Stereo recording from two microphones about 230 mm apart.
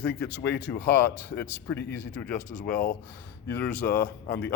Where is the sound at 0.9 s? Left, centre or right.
Centre.